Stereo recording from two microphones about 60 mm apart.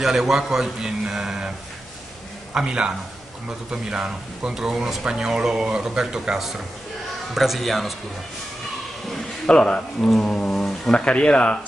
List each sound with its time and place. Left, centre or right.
0.0 s speech: centre
2.5 s speech: centre
9.1 s speech: centre
10.2 s a sound: centre
10.6 s speech: centre